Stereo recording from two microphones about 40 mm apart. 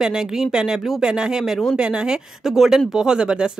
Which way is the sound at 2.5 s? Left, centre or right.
Centre.